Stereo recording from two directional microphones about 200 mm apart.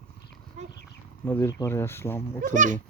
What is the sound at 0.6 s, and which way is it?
Horse, 35° right (ahead or behind).